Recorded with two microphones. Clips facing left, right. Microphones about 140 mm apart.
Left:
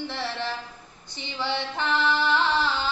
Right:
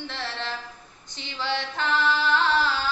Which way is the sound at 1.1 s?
15° left (ahead or behind).